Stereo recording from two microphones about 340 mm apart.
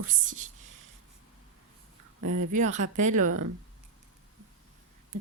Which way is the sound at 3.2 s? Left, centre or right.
Right.